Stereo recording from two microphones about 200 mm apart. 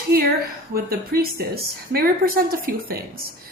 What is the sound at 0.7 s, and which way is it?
A woman's voice, 50° right (ahead or behind).